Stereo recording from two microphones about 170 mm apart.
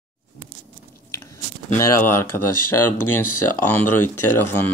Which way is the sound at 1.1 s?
20° left (ahead or behind).